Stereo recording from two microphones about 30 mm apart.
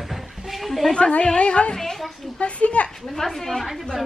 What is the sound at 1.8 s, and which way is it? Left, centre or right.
Speech, centre.